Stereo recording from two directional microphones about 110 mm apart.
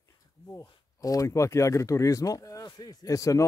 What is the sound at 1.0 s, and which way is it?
Speech, 30° left (ahead or behind).